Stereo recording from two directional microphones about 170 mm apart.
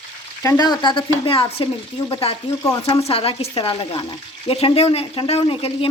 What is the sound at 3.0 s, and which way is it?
Speech, 35° left (ahead or behind).